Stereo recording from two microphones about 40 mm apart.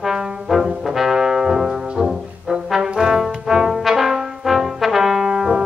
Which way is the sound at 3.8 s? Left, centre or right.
Centre.